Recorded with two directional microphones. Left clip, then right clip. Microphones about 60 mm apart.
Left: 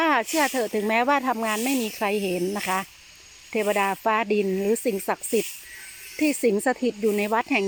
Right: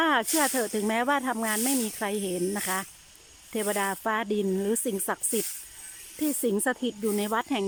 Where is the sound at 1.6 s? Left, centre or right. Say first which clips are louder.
Left 4 dB; centre.